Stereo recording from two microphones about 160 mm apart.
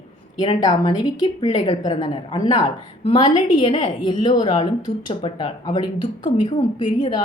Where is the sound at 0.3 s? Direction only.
25° left (ahead or behind).